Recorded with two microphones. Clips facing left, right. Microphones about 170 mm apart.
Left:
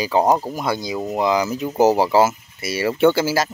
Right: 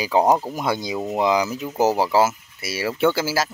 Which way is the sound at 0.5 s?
20° right (ahead or behind).